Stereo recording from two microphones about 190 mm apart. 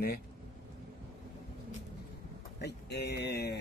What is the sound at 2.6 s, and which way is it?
Speech, 60° left (ahead or behind).